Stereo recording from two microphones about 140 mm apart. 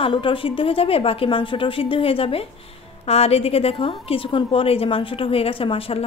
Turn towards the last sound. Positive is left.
turn(degrees=45)  # may be behind; listen again after turning